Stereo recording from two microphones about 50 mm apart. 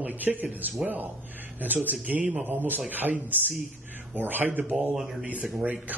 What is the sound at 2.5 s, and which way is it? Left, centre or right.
Speech, right.